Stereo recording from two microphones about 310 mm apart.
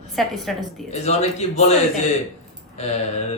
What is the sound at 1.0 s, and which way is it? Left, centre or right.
Speech, left.